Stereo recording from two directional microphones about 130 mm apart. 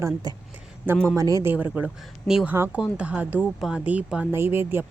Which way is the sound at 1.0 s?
25° right (ahead or behind).